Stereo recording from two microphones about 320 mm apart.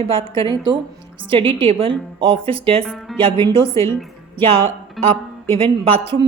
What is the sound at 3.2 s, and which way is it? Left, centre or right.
A woman's voice, centre.